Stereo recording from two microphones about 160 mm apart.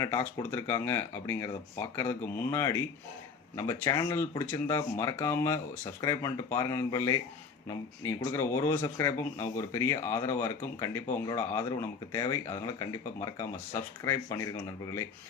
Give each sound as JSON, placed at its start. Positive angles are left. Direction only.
{"t": 0.0, "sound": "speech", "side_deg": 20}